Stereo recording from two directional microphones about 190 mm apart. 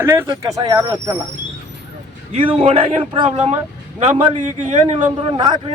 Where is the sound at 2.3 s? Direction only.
25° right (ahead or behind).